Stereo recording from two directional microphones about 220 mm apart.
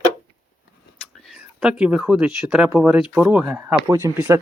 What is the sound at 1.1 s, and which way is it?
Speech, centre (ahead or behind).